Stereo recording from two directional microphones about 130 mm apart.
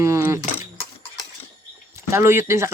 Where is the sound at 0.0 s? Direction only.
25° right (ahead or behind).